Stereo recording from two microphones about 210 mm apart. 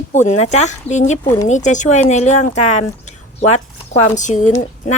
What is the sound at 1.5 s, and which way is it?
Speech, 35° left (ahead or behind).